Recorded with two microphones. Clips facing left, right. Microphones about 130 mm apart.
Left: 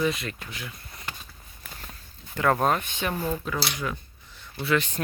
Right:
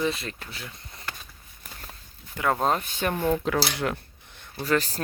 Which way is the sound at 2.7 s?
35° right (ahead or behind).